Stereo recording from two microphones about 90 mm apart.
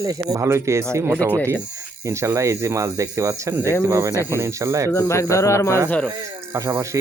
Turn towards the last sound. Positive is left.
turn(degrees=-35)  # may be behind; listen again after turning